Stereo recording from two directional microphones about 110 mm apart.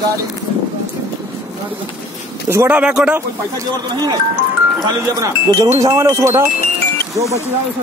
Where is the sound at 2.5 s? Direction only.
20° right (ahead or behind).